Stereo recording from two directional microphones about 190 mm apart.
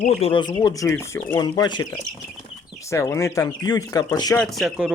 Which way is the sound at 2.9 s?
15° left (ahead or behind).